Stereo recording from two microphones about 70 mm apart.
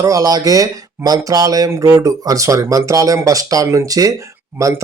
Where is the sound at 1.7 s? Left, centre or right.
Right.